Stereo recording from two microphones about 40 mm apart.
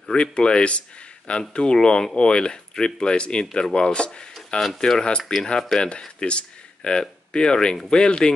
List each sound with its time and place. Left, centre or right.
0.1 s speech: left
4.6 s speech: centre